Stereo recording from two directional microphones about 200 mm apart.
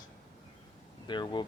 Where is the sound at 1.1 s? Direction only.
20° left (ahead or behind).